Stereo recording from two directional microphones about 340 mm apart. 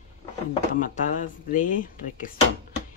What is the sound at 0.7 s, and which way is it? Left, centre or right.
A woman's voice, left.